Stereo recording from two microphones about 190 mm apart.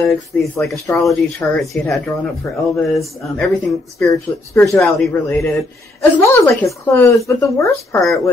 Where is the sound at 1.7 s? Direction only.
5° left (ahead or behind).